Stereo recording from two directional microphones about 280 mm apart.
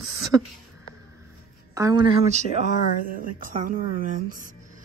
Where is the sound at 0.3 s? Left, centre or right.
Centre.